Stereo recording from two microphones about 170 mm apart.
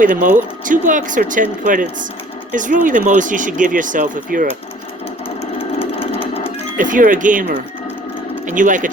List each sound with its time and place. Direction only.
0.0 s speech: 50° right (ahead or behind)
5.5 s a sound: 35° left (ahead or behind)
6.7 s speech: 50° right (ahead or behind)